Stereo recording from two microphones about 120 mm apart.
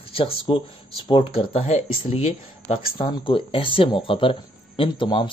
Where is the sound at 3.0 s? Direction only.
45° left (ahead or behind).